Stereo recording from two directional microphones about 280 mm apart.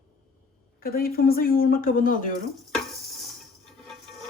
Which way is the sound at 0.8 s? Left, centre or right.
Left.